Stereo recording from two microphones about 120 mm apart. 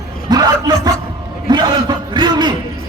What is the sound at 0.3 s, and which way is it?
A man's voice, 35° right (ahead or behind).